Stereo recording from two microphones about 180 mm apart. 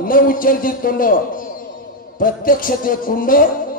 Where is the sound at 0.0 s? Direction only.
50° left (ahead or behind).